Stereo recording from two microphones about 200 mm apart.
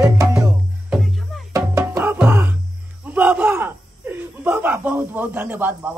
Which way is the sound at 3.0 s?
10° right (ahead or behind).